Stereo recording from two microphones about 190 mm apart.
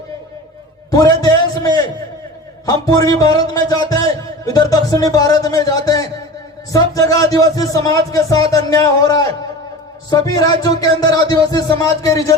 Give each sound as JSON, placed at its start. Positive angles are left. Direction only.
{"t": 0.9, "sound": "a man's voice", "side_deg": 20}